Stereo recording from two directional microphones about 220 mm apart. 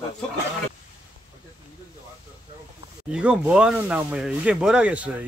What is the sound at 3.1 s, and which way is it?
Speech, 5° right (ahead or behind).